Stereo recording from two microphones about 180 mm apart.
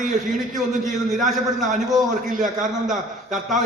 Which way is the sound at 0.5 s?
Centre (ahead or behind).